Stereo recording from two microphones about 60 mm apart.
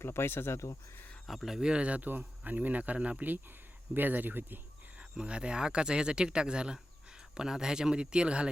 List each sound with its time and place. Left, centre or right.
0.0 s speech: left
1.3 s speech: centre; by 4.6 s right
4.9 s speech: centre